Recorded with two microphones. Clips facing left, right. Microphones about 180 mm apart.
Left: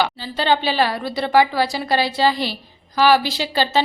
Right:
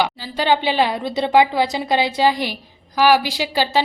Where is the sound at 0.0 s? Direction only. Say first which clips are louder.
Right 1 dB; 10° right (ahead or behind).